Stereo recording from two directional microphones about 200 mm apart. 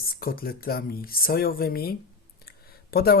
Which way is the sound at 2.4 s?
50° left (ahead or behind).